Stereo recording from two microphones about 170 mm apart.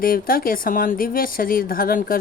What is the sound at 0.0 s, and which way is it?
Speech, 60° left (ahead or behind).